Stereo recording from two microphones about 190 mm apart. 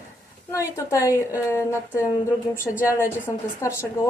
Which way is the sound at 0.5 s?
15° left (ahead or behind).